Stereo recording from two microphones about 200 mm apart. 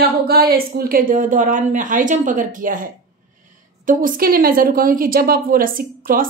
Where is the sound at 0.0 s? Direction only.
50° right (ahead or behind).